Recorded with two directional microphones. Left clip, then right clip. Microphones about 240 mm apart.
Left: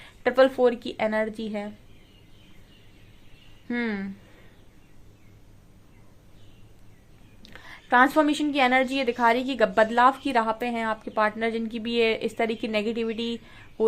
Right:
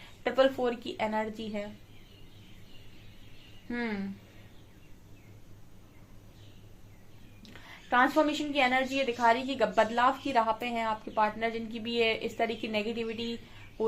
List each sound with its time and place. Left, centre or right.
0.2 s a woman's voice: left
3.7 s a woman's voice: left
7.4 s a woman's voice: left